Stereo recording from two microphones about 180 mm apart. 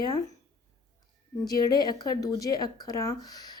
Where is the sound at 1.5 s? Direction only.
20° left (ahead or behind).